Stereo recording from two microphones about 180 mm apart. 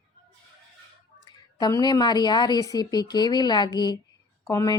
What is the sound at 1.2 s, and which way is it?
A woman's voice, 20° left (ahead or behind).